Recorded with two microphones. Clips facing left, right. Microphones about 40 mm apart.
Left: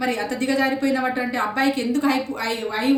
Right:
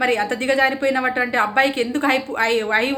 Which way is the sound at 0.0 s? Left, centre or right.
Right.